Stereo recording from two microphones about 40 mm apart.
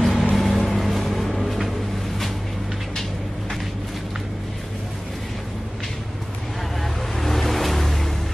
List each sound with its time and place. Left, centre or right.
0.0 s vehicle: centre
7.2 s vehicle: centre